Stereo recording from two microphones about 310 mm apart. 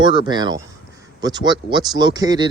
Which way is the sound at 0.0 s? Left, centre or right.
Centre.